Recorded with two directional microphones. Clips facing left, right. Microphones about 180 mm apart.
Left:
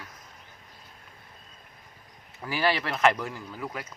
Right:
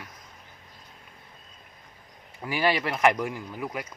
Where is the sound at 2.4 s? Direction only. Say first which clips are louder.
Right 2 dB; 15° right (ahead or behind).